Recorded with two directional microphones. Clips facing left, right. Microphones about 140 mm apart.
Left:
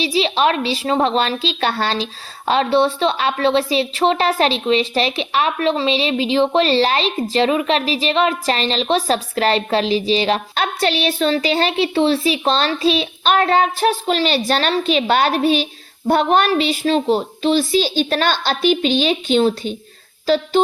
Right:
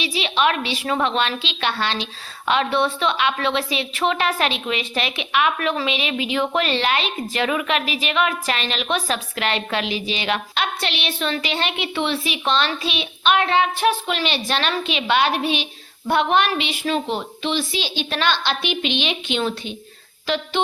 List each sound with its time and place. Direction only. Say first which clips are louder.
0.0 s a woman's voice: left 4 dB; 35° left (ahead or behind)